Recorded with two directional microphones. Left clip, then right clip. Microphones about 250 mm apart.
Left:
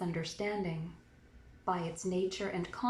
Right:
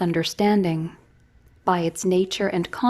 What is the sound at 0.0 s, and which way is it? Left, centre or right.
A woman's voice, right.